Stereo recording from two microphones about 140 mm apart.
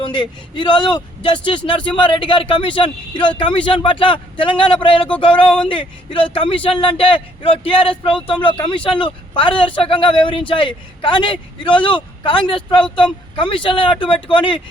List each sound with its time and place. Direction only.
0.0 s speech: 35° left (ahead or behind)
12.8 s speech: 5° left (ahead or behind)
13.3 s speech: 35° left (ahead or behind)